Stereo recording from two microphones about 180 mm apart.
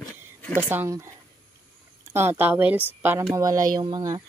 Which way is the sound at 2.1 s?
10° right (ahead or behind).